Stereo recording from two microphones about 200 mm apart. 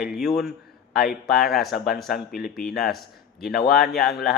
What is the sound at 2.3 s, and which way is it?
Speech, 50° left (ahead or behind).